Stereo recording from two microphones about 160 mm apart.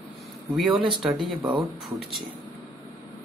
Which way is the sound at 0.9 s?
Centre (ahead or behind).